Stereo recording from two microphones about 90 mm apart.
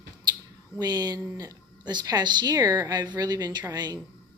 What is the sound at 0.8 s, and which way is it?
A woman's voice, 45° right (ahead or behind).